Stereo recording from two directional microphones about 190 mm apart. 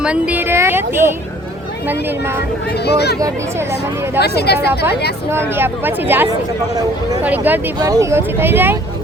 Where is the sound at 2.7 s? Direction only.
60° left (ahead or behind).